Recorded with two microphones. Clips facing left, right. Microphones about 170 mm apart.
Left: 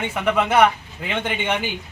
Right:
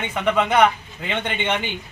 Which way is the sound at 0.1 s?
5° left (ahead or behind).